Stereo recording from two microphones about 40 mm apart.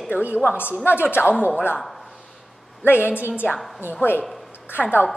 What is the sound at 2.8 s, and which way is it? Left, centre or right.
A woman's voice, left.